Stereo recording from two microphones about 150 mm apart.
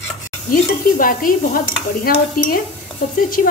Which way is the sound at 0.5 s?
70° left (ahead or behind).